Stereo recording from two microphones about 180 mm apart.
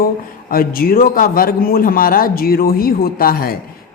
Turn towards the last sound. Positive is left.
turn(degrees=55)  # may be behind; listen again after turning